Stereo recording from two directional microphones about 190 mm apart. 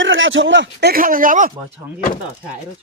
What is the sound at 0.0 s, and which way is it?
Speech, 85° right.